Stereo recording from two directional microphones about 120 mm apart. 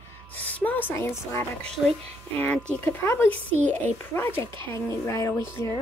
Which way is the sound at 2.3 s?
10° left (ahead or behind).